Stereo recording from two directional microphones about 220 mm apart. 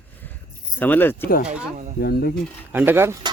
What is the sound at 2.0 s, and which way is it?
Speech, 45° left (ahead or behind).